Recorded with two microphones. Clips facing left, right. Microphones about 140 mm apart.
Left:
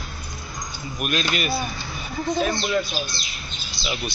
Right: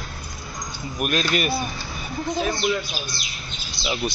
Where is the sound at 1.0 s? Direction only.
50° right (ahead or behind).